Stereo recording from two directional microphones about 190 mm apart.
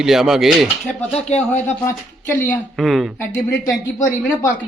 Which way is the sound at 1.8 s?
10° left (ahead or behind).